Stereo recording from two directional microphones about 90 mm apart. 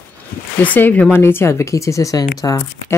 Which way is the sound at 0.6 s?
20° left (ahead or behind).